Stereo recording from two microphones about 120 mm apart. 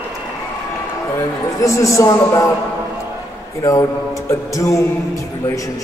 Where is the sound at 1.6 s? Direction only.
25° left (ahead or behind).